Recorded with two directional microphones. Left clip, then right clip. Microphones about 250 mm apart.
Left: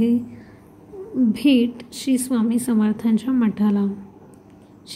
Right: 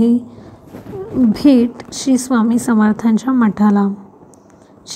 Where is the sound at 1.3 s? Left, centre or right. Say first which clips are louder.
Right 6 dB; right.